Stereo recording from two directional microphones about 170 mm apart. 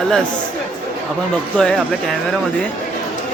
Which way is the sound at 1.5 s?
5° left (ahead or behind).